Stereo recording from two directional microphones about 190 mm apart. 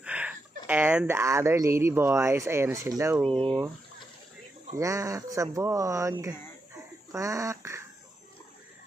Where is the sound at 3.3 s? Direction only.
25° right (ahead or behind).